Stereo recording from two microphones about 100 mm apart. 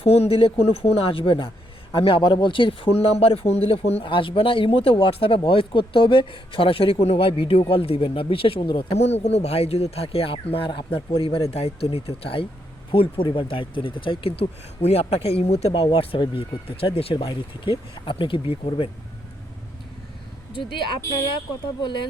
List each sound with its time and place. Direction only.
0.0 s speech: 90° left; by 8.6 s 65° left (ahead or behind)
8.6 s speech: 55° left (ahead or behind)
9.0 s speech: 90° left; by 10.7 s 65° left (ahead or behind)
10.7 s a man's voice: 55° left (ahead or behind); by 11.4 s 70° left (ahead or behind)
11.5 s speech: 85° left; by 18.9 s 65° left (ahead or behind)
20.5 s speech: 55° left (ahead or behind)